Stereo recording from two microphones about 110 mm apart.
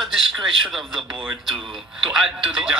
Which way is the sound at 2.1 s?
5° right (ahead or behind).